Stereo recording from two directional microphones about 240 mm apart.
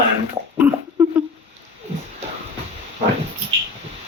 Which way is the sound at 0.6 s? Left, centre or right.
Centre.